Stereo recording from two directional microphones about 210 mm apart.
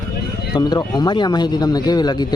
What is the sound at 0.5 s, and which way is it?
Speech, 20° left (ahead or behind).